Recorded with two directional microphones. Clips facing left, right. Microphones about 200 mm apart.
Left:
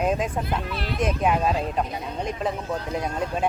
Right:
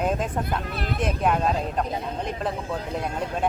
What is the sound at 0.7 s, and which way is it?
Speech, 50° right (ahead or behind).